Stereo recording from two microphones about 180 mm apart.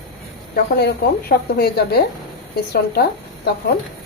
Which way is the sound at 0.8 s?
60° left (ahead or behind).